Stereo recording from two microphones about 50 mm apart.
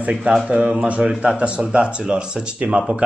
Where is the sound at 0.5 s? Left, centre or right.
Right.